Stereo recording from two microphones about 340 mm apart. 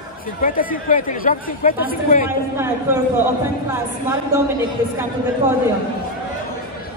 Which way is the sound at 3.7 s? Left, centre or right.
Centre.